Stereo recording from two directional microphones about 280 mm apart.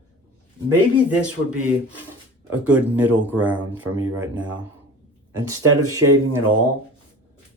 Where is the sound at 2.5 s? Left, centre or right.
Centre.